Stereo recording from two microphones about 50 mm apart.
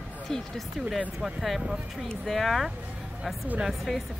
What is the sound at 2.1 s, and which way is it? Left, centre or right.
Speech, centre.